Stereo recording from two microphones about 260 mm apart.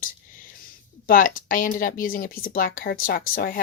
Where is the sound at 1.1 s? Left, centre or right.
Left.